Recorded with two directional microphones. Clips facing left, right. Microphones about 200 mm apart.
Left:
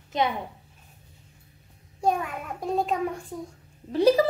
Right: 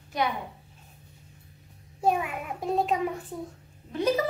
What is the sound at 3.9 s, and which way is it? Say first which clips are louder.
Speech: left 6 dB; 35° left (ahead or behind).